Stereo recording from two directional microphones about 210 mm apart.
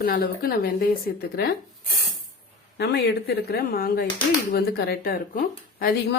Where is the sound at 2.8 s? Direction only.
50° left (ahead or behind).